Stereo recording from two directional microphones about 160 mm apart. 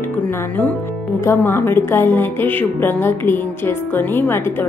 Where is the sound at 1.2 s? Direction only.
15° left (ahead or behind).